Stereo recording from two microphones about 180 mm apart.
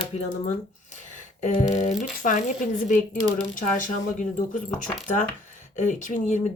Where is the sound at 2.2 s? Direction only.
45° left (ahead or behind).